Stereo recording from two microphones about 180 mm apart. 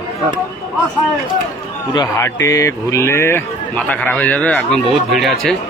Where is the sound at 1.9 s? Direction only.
15° left (ahead or behind).